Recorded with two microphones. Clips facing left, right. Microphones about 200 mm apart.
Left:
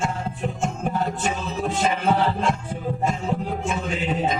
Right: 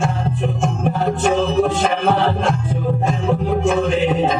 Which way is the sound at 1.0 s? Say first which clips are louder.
Right 11 dB; 80° right.